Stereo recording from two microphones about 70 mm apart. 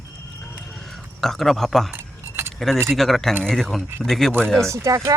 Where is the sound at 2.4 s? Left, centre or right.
Right.